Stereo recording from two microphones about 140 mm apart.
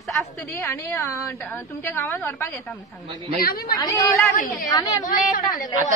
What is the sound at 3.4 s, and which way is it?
Speech, 90° left.